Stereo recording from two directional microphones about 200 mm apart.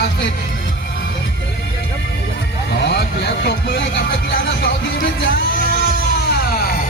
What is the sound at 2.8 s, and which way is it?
Speech, 60° left (ahead or behind).